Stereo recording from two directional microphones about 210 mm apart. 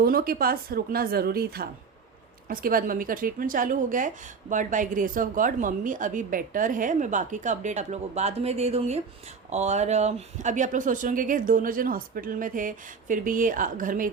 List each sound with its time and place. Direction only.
0.0 s a woman's voice: 45° right (ahead or behind)